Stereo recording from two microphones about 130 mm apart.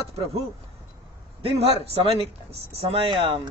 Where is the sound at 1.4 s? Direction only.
45° right (ahead or behind).